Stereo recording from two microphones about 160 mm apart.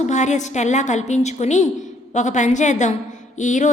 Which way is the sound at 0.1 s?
50° left (ahead or behind).